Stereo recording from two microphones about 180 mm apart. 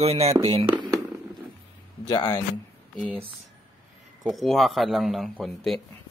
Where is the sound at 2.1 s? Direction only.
25° left (ahead or behind).